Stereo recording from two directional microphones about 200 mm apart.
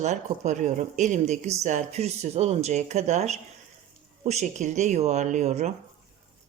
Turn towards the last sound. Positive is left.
turn(degrees=-35)  # may be behind; listen again after turning